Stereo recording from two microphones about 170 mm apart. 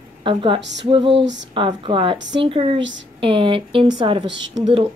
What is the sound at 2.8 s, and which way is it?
Music, 90° right.